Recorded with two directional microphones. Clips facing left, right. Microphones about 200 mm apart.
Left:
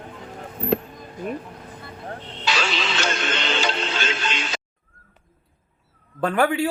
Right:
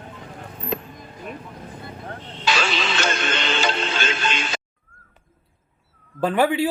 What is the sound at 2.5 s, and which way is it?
Music, 50° right (ahead or behind).